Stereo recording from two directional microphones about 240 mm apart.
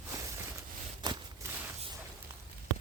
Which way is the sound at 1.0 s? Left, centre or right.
Centre.